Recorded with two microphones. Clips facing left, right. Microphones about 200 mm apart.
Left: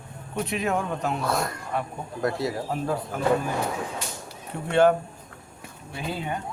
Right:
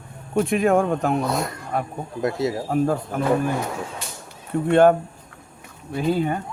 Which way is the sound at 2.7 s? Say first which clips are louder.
Right 6 dB; 50° right (ahead or behind).